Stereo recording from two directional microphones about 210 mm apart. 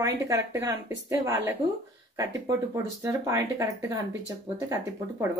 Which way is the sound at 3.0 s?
15° right (ahead or behind).